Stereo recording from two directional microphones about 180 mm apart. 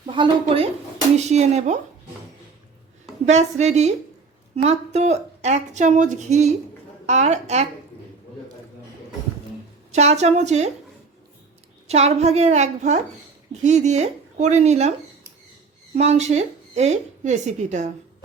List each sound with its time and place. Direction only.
0.0 s a sound: 25° right (ahead or behind)
0.4 s a woman's voice: 35° right (ahead or behind)
3.2 s a woman's voice: 40° right (ahead or behind)
9.9 s a woman's voice: 40° right (ahead or behind)
11.9 s a woman's voice: 35° right (ahead or behind)
16.0 s a woman's voice: 40° right (ahead or behind)